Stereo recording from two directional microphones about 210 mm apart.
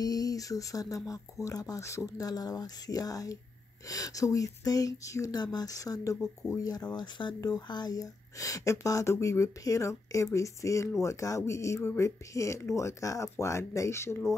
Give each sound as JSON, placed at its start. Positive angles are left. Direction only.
{"t": 0.0, "sound": "speech", "side_deg": 15}